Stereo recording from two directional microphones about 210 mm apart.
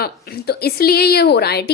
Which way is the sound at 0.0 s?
45° left (ahead or behind).